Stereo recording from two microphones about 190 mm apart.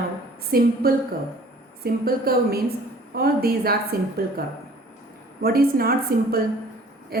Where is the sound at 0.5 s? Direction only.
50° right (ahead or behind).